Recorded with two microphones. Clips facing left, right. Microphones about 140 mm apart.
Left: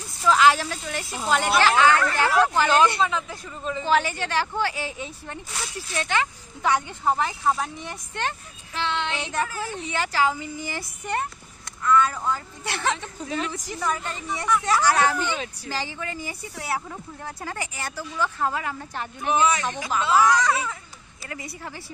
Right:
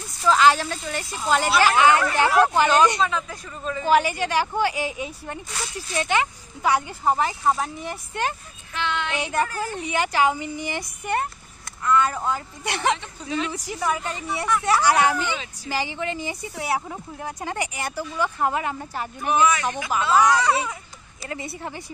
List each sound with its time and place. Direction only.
0.2 s speech: centre (ahead or behind)
1.8 s a woman's voice: 15° right (ahead or behind)
3.0 s speech: 15° left (ahead or behind)
3.8 s a woman's voice: 10° right (ahead or behind)
8.7 s child singing: 30° left (ahead or behind)
9.2 s a woman's voice: 10° right (ahead or behind)
9.5 s speech: centre (ahead or behind)
9.8 s a woman's voice: 15° right (ahead or behind)
13.2 s speech: 45° left (ahead or behind)
13.5 s a woman's voice: 10° right (ahead or behind)
15.3 s speech: 55° left (ahead or behind)
15.7 s a woman's voice: 15° right (ahead or behind)
20.1 s speech: 5° left (ahead or behind)
21.3 s a woman's voice: 25° right (ahead or behind)